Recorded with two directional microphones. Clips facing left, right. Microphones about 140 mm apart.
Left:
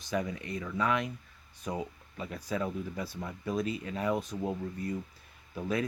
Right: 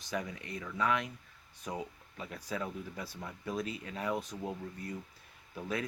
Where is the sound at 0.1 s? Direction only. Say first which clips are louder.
Left 5 dB; 10° left (ahead or behind).